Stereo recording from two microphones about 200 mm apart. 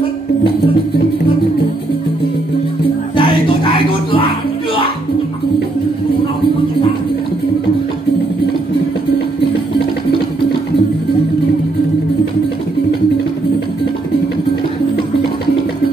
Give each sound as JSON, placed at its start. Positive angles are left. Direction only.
{"t": 3.2, "sound": "music", "side_deg": 25}